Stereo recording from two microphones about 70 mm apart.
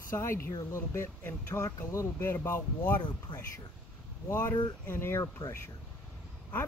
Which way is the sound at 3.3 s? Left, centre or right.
Left.